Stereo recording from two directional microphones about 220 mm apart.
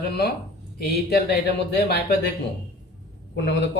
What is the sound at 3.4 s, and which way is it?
Speech, 50° left (ahead or behind).